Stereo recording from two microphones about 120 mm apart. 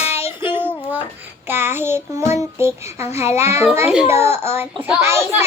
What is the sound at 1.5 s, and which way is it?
Child singing, 20° right (ahead or behind).